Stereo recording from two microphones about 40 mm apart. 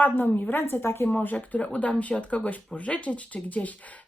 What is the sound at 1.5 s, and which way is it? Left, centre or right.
Speech, left.